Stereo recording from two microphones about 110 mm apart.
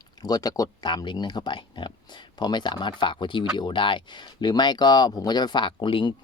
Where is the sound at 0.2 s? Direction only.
35° left (ahead or behind).